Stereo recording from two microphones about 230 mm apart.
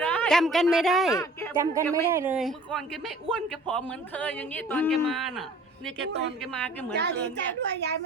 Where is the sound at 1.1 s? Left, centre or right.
Centre.